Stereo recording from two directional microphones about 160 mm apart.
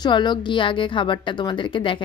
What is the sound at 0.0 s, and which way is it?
A woman's voice, 30° left (ahead or behind).